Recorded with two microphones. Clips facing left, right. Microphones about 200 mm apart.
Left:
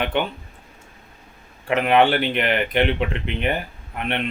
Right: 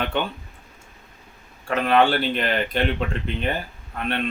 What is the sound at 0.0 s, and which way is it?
Speech, 15° left (ahead or behind).